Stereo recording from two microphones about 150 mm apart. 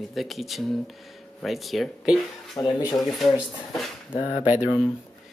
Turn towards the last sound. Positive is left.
turn(degrees=-10)  # may be behind; listen again after turning